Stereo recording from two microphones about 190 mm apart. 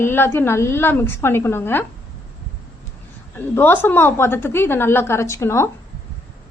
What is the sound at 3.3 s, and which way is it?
A woman's voice, 10° left (ahead or behind).